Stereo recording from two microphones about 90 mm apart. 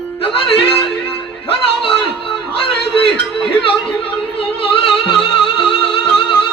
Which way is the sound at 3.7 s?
80° left.